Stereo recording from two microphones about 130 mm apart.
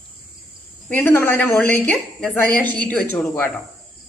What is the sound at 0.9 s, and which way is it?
A woman's voice, 15° left (ahead or behind).